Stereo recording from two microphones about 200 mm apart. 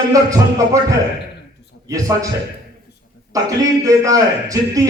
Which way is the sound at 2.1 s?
15° right (ahead or behind).